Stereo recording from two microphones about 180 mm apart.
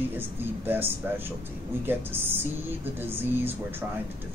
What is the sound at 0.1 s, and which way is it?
Speech, 10° right (ahead or behind).